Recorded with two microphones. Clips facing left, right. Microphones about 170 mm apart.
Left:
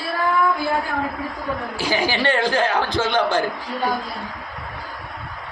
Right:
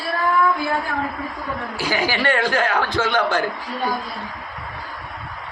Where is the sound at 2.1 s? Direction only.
25° left (ahead or behind).